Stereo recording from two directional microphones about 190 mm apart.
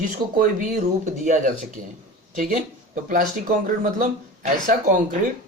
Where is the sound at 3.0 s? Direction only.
45° right (ahead or behind).